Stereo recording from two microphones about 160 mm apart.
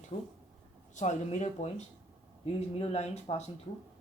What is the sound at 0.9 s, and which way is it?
Speech, 45° left (ahead or behind).